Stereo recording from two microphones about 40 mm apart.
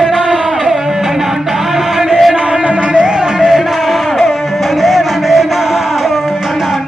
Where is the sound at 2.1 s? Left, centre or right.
Centre.